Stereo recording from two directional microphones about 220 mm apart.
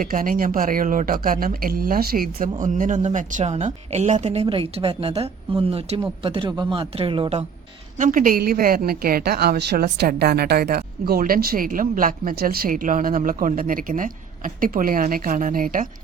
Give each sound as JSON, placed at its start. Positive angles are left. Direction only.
{"t": 0.0, "sound": "a woman's voice", "side_deg": -40}
{"t": 7.9, "sound": "a woman's voice", "side_deg": -35}